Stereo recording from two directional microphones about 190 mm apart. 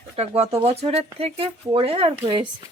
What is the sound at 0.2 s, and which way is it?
Speech, 30° right (ahead or behind).